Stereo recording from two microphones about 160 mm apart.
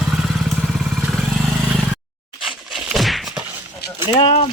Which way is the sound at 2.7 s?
5° right (ahead or behind).